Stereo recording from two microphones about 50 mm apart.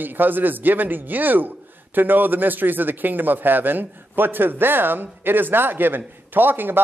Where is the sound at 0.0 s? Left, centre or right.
Right.